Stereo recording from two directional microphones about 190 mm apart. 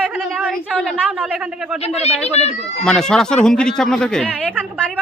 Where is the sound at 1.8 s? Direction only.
35° left (ahead or behind).